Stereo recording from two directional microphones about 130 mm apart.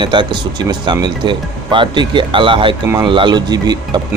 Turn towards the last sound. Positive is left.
turn(degrees=-30)  # may be behind; listen again after turning